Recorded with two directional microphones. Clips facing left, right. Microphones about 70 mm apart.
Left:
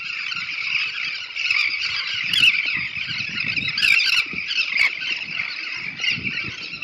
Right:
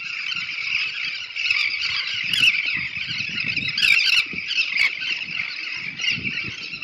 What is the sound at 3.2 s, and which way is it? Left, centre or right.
Squeal, left.